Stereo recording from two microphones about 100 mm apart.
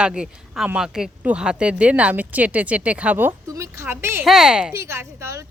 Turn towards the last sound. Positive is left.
turn(degrees=-30)  # may be behind; listen again after turning